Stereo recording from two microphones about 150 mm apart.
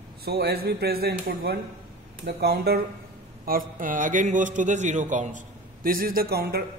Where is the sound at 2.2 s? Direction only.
90° right.